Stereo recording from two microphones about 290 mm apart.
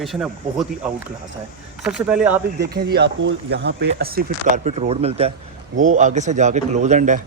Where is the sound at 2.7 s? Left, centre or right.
Right.